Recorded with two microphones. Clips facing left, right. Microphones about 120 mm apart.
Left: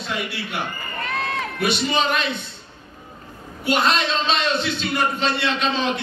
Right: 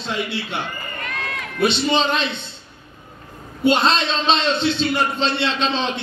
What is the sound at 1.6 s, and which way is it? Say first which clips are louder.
Speech: right 3 dB; 25° right (ahead or behind).